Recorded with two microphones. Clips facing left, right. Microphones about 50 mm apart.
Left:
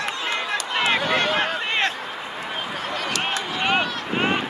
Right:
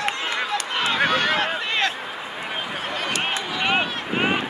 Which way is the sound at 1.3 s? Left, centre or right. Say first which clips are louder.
Even; centre.